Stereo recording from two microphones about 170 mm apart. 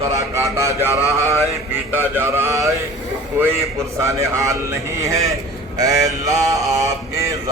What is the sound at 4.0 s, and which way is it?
Speech, 20° right (ahead or behind).